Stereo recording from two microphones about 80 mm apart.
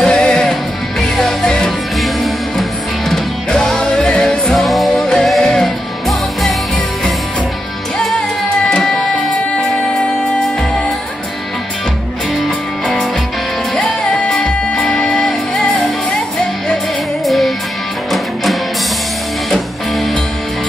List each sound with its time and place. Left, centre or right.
0.0 s music: centre
8.6 s music: centre
12.4 s music: centre
17.2 s music: centre